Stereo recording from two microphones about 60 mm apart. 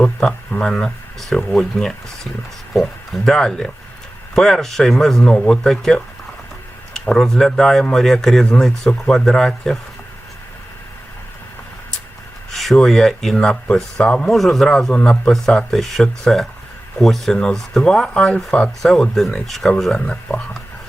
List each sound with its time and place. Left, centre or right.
0.0 s speech: centre
12.5 s speech: centre
14.3 s speech: centre